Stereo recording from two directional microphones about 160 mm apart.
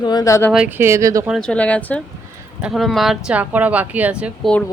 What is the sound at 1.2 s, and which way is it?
A woman's voice, centre (ahead or behind).